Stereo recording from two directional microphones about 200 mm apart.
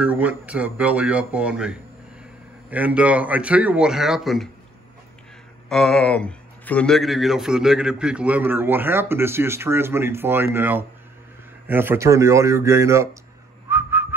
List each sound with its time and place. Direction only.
0.0 s a man's voice: 5° right (ahead or behind)
5.7 s a man's voice: centre (ahead or behind); by 13.1 s 15° right (ahead or behind)
13.7 s whistling: 10° right (ahead or behind)